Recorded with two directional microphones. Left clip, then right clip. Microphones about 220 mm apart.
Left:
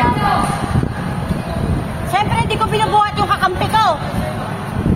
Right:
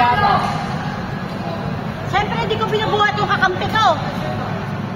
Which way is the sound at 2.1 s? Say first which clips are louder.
Left 2 dB; 45° left (ahead or behind).